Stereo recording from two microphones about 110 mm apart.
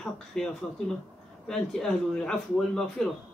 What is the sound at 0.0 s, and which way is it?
A man's voice, 5° left (ahead or behind).